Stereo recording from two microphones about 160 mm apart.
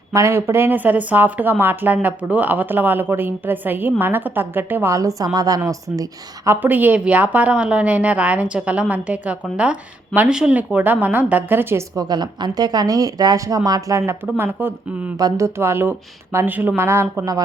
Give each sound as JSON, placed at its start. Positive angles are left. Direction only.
{"t": 0.1, "sound": "speech", "side_deg": -20}
{"t": 12.0, "sound": "speech", "side_deg": -25}